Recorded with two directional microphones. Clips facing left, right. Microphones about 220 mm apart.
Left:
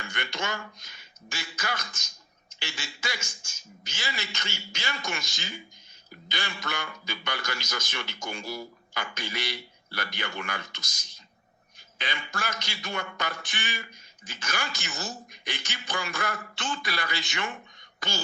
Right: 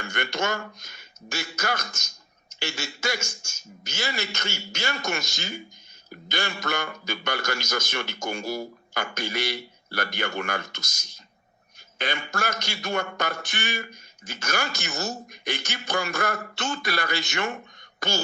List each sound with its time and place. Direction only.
0.0 s speech: 45° right (ahead or behind)